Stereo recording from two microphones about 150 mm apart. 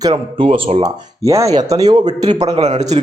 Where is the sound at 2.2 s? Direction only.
45° right (ahead or behind).